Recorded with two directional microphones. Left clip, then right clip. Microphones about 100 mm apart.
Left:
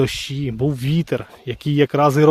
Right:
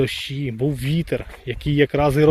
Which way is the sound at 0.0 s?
50° left (ahead or behind).